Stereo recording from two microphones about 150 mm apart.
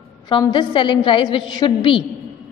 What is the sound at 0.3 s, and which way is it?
A woman's voice, 30° left (ahead or behind).